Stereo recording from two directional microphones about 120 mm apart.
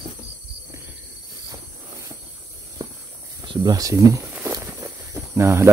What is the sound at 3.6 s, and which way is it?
Speech, 30° right (ahead or behind).